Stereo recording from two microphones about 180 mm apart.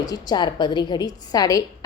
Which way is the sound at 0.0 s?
20° left (ahead or behind).